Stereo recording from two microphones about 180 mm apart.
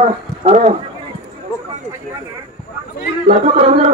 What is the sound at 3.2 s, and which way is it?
Speech, 40° right (ahead or behind).